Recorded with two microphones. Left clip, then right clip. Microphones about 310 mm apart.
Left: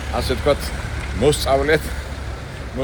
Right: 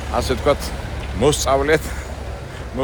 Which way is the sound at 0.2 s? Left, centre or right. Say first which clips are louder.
Right 1 dB; centre.